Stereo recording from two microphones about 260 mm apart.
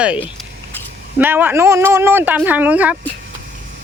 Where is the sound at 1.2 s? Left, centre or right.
Centre.